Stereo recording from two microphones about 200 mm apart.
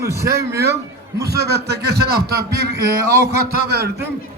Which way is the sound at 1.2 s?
55° right (ahead or behind).